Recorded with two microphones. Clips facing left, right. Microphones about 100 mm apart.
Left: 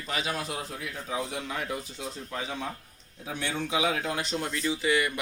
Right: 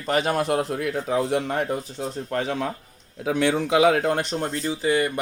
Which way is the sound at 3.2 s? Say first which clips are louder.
Right 11 dB; 80° right.